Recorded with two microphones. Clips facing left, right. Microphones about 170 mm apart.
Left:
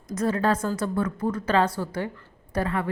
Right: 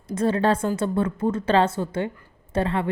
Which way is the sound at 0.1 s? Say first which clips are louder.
Right 3 dB; 30° right (ahead or behind).